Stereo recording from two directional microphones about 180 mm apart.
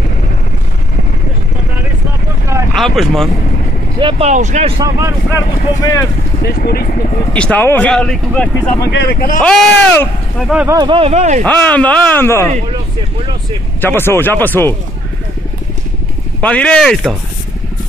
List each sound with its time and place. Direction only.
2.7 s speech: centre (ahead or behind)
4.0 s speech: 30° right (ahead or behind)
4.3 s speech: 40° right (ahead or behind)
4.7 s speech: 20° right (ahead or behind)
5.3 s speech: 15° left (ahead or behind)
6.4 s speech: 55° left (ahead or behind)
7.3 s speech: 5° left (ahead or behind)
8.8 s speech: 65° left (ahead or behind)
9.4 s speech: 5° left (ahead or behind)
10.7 s speech: 25° right (ahead or behind)
11.4 s speech: 10° left (ahead or behind)
13.7 s speech: 10° left (ahead or behind)
16.3 s speech: 5° left (ahead or behind)